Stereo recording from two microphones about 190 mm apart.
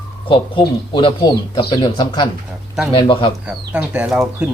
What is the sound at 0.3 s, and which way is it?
Speech, 25° left (ahead or behind).